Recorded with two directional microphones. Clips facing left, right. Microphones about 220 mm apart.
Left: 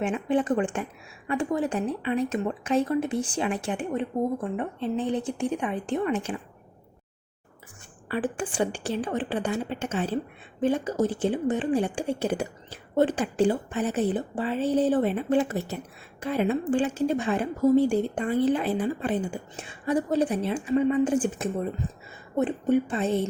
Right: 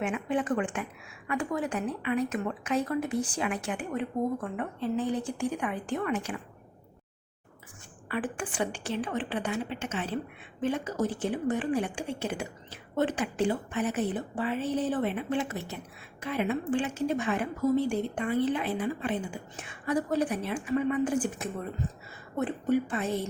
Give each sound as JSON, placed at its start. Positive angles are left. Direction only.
{"t": 0.0, "sound": "a woman's voice", "side_deg": 30}
{"t": 8.0, "sound": "a woman's voice", "side_deg": 30}